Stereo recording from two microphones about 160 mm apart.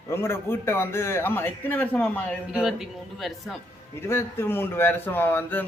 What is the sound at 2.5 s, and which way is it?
Speech, 5° right (ahead or behind).